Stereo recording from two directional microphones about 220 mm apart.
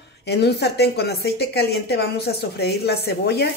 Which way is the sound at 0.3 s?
50° left (ahead or behind).